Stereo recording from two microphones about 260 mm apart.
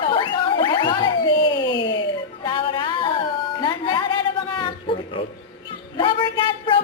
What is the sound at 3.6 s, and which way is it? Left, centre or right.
Music, centre.